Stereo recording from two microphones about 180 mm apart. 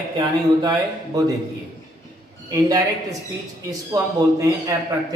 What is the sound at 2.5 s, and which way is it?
A man's voice, 15° right (ahead or behind).